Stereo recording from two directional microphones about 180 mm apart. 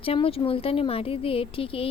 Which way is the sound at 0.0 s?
30° left (ahead or behind).